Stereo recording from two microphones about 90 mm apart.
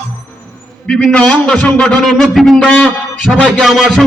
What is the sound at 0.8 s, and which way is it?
A man's voice, 10° left (ahead or behind).